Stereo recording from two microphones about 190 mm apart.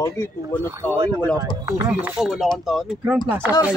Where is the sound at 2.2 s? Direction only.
Centre (ahead or behind).